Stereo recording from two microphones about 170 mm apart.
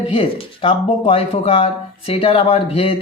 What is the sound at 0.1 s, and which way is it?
Speech, 35° left (ahead or behind).